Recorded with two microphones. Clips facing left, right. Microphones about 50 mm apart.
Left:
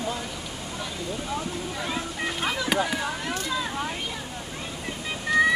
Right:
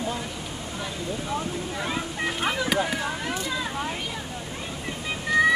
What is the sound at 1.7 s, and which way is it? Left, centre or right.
Vehicle, centre.